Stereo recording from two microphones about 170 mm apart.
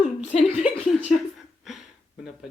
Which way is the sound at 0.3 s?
45° left (ahead or behind).